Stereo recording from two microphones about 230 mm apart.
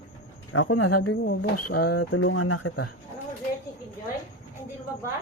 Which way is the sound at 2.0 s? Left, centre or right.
Left.